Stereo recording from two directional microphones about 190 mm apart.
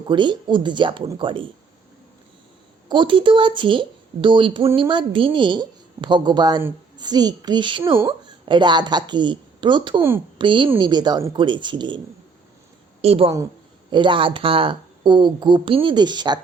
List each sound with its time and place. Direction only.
0.1 s speech: 25° right (ahead or behind)
2.9 s a woman's voice: 25° right (ahead or behind)
13.0 s a woman's voice: 30° right (ahead or behind)